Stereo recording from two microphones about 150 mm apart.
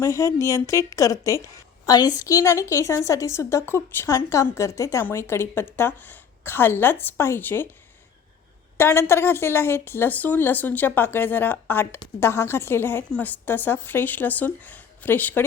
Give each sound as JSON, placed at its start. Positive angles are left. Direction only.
{"t": 0.0, "sound": "a woman's voice", "side_deg": 20}
{"t": 8.8, "sound": "a woman's voice", "side_deg": 15}